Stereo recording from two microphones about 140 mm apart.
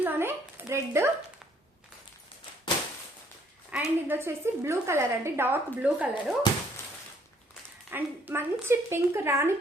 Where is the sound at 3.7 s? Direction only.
10° right (ahead or behind).